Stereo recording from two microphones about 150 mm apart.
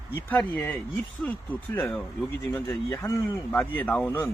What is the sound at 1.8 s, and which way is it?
Speech, 10° left (ahead or behind).